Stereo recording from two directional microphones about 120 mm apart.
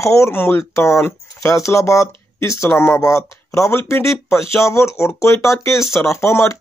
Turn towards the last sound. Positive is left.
turn(degrees=25)  # may be behind; listen again after turning